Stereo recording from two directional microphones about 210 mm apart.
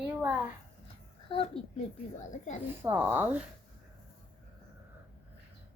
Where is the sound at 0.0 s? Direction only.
5° right (ahead or behind).